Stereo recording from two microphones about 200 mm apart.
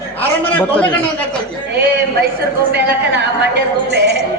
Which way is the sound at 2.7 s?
55° right (ahead or behind).